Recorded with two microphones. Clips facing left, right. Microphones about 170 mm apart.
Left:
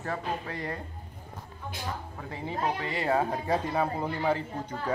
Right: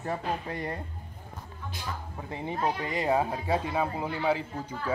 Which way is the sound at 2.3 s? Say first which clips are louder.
Right 1 dB; 20° right (ahead or behind).